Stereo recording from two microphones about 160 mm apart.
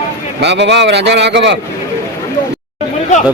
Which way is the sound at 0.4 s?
90° right.